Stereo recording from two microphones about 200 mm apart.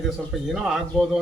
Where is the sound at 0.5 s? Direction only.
Centre (ahead or behind).